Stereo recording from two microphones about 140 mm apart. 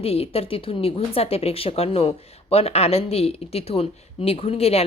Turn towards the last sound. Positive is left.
turn(degrees=45)  # may be behind; listen again after turning